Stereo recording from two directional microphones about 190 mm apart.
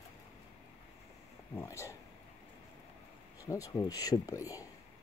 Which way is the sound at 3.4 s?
15° left (ahead or behind).